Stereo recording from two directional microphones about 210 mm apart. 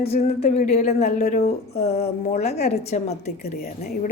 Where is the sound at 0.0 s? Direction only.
30° left (ahead or behind).